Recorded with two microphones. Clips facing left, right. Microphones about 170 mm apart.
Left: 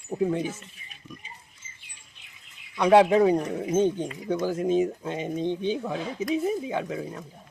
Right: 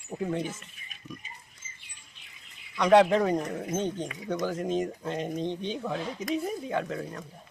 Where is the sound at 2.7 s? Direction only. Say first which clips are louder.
Left 2 dB; 10° left (ahead or behind).